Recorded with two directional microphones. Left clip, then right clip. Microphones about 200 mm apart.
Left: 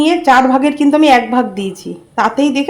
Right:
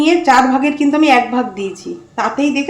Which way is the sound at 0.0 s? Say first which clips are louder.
Left 1 dB; 35° left (ahead or behind).